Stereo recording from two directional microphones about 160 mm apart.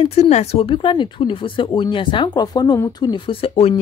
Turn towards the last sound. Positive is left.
turn(degrees=40)  # may be behind; listen again after turning